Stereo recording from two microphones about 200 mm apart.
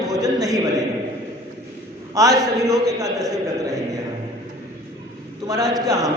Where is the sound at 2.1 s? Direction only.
15° right (ahead or behind).